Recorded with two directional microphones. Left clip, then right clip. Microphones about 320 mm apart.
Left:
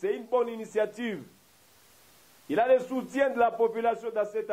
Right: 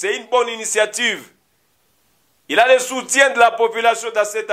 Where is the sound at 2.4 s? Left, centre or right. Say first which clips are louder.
Right 11 dB; centre.